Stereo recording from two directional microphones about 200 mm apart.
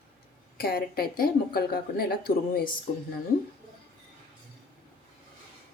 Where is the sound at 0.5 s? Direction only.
50° left (ahead or behind).